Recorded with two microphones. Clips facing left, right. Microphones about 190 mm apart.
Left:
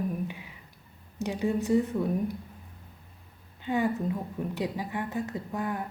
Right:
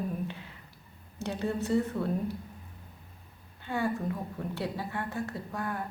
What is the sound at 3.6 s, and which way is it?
A woman's voice, 20° left (ahead or behind).